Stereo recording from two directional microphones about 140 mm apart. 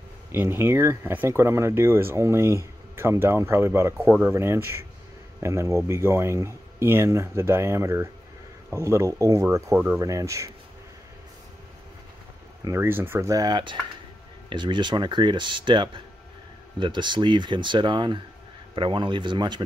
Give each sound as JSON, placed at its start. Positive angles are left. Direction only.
{"t": 0.3, "sound": "speech", "side_deg": -15}
{"t": 12.6, "sound": "speech", "side_deg": -20}